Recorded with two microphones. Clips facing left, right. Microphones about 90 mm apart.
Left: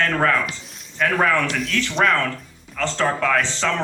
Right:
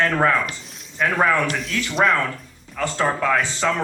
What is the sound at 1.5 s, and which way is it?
A man's voice, centre (ahead or behind).